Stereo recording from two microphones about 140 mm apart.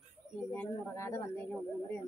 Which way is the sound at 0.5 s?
20° left (ahead or behind).